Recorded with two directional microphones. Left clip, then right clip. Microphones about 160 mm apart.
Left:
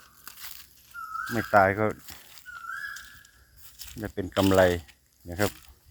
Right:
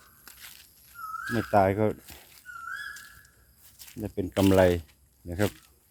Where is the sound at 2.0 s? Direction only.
65° left (ahead or behind).